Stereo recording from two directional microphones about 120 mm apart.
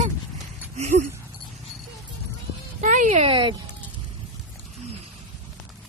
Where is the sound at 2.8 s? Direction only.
90° right.